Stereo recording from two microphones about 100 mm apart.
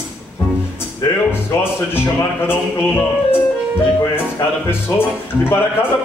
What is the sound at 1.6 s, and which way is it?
Speech, 25° left (ahead or behind).